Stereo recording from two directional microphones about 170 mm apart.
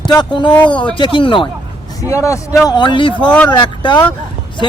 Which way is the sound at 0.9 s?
30° left (ahead or behind).